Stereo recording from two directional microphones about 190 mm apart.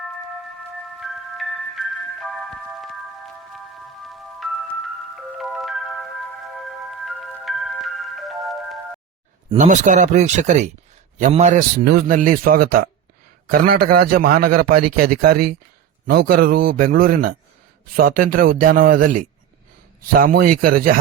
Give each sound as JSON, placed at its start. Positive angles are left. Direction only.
{"t": 0.9, "sound": "glockenspiel", "side_deg": 0}
{"t": 4.1, "sound": "music", "side_deg": 0}
{"t": 7.0, "sound": "music", "side_deg": 0}
{"t": 9.5, "sound": "speech", "side_deg": -40}
{"t": 11.9, "sound": "a man's voice", "side_deg": -50}